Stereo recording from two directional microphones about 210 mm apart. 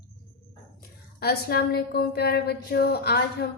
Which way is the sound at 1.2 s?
50° left (ahead or behind).